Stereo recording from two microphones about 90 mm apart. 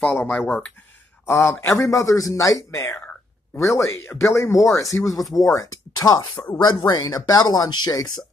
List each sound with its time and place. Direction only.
0.0 s speech: 20° left (ahead or behind); by 8.1 s 40° left (ahead or behind)